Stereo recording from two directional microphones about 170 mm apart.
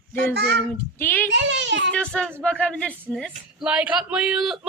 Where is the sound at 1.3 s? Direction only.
90° right.